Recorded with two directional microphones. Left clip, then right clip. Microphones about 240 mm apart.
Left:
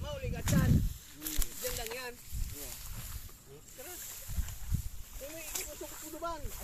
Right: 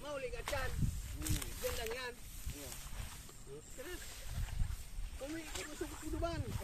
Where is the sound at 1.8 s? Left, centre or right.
Left.